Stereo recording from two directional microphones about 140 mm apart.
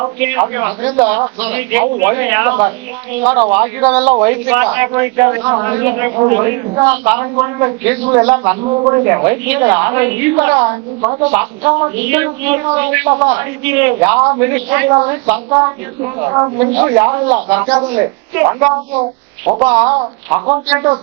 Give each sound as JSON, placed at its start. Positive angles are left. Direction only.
{"t": 0.2, "sound": "a woman's voice", "side_deg": -15}
{"t": 11.3, "sound": "a woman's voice", "side_deg": -15}